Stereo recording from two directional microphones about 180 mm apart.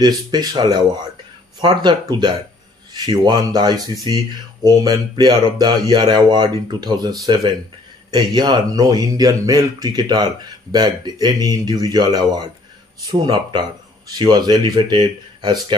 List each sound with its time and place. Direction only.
0.3 s speech: 25° right (ahead or behind)